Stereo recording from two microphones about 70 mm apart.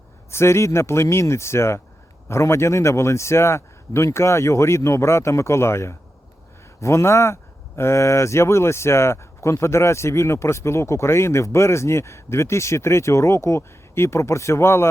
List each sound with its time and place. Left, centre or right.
0.3 s a man's voice: left